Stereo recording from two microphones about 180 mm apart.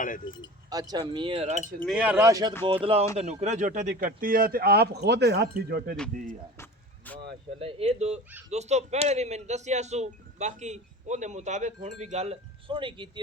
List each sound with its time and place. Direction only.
0.2 s speech: 25° left (ahead or behind)
0.7 s speech: 20° right (ahead or behind); by 1.6 s 35° right (ahead or behind)
1.9 s speech: 10° right (ahead or behind)
2.8 s speech: 35° right (ahead or behind); by 6.0 s 60° right (ahead or behind)
6.6 s vehicle: 10° left (ahead or behind)
7.6 s speech: 35° right (ahead or behind)